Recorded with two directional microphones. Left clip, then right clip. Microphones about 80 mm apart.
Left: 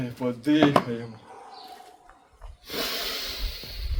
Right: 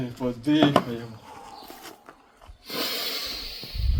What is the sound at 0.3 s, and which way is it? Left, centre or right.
Speech, left.